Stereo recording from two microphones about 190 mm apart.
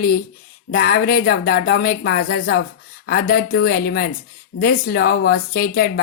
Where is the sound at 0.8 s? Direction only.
50° left (ahead or behind).